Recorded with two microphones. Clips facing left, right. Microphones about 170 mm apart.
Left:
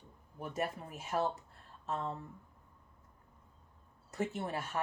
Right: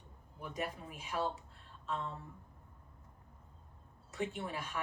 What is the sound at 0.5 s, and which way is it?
Speech, 45° left (ahead or behind).